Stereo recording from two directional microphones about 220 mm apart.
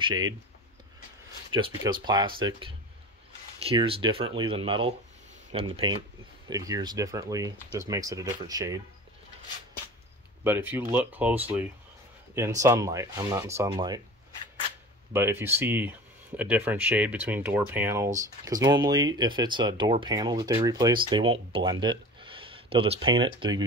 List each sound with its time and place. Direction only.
0.0 s speech: 20° right (ahead or behind)
1.5 s speech: 20° right (ahead or behind)
10.4 s speech: 10° right (ahead or behind)
15.1 s speech: 10° right (ahead or behind)